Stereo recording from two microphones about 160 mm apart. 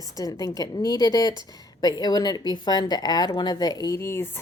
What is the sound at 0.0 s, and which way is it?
Speech, 20° left (ahead or behind).